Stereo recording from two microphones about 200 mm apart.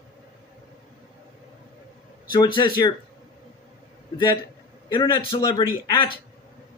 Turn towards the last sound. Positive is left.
turn(degrees=25)  # may be behind; listen again after turning